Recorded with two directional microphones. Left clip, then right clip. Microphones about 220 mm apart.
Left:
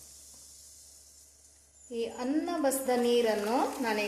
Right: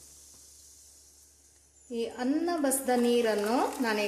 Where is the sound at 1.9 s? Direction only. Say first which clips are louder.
Right 1 dB; 20° right (ahead or behind).